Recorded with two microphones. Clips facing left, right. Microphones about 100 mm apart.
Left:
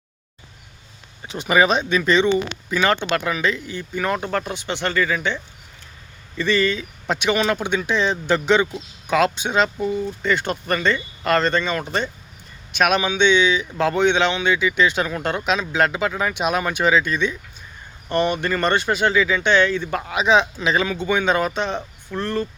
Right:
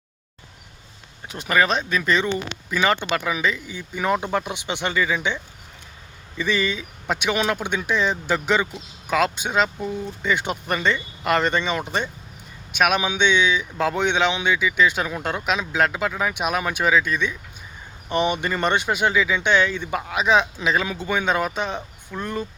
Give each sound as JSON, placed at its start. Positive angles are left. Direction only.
{"t": 1.2, "sound": "speech", "side_deg": 0}
{"t": 10.2, "sound": "speech", "side_deg": -15}